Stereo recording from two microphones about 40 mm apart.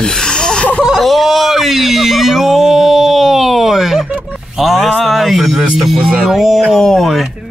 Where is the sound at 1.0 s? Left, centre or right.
Centre.